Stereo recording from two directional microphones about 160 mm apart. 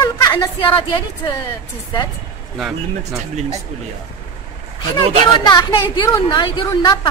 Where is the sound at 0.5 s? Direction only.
35° left (ahead or behind).